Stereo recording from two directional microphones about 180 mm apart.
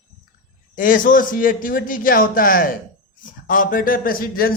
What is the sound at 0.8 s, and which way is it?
A man's voice, 50° left (ahead or behind).